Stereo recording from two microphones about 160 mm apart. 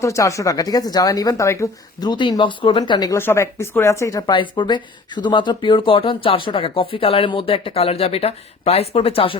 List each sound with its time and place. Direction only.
0.0 s speech: 20° left (ahead or behind)
3.2 s a woman's voice: 15° left (ahead or behind); by 9.4 s 35° left (ahead or behind)